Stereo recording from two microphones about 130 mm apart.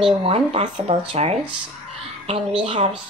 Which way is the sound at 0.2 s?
50° right (ahead or behind).